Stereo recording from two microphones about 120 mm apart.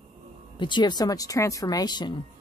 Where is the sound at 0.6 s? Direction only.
40° left (ahead or behind).